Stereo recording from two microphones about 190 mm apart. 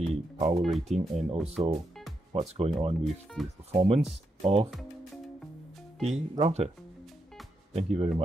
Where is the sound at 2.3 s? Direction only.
35° right (ahead or behind).